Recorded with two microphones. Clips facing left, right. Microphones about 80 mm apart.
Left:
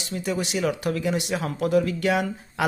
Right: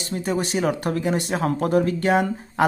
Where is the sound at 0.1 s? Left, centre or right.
Right.